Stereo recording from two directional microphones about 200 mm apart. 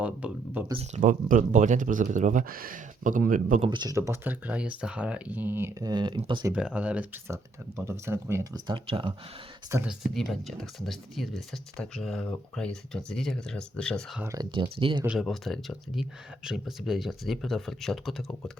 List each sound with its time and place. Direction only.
0.0 s speech: 5° right (ahead or behind)
0.7 s speech: 35° right (ahead or behind)
3.7 s speech: 20° right (ahead or behind)
6.5 s speech: 5° right (ahead or behind); by 9.1 s 25° right (ahead or behind)
9.7 s speech: 5° right (ahead or behind)
14.2 s speech: 15° right (ahead or behind)
14.5 s speech: 25° right (ahead or behind)
15.0 s speech: 5° right (ahead or behind)